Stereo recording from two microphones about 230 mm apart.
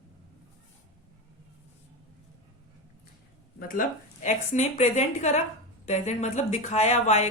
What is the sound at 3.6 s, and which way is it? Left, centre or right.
Speech, left.